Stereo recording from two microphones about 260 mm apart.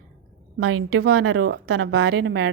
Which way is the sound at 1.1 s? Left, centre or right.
Right.